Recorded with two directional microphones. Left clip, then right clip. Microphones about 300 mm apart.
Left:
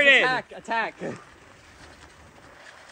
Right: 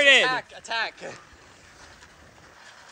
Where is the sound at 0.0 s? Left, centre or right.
Centre.